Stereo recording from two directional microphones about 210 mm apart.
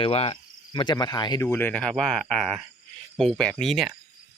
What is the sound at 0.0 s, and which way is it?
Cricket, 25° left (ahead or behind).